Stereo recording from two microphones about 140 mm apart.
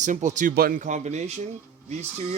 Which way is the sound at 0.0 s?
60° right (ahead or behind).